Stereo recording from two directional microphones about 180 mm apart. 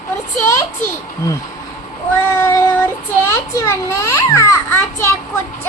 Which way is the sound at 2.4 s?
10° left (ahead or behind).